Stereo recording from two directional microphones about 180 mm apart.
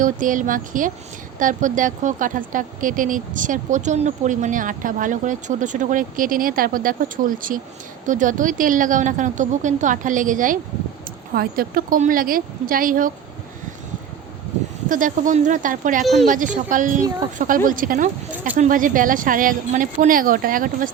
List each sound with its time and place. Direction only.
0.0 s speech: 45° right (ahead or behind)
14.8 s speech: 45° right (ahead or behind)